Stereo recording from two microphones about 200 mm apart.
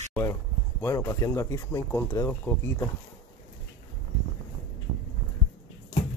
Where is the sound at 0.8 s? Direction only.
15° left (ahead or behind).